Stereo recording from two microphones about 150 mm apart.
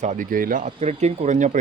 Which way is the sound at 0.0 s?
55° right (ahead or behind).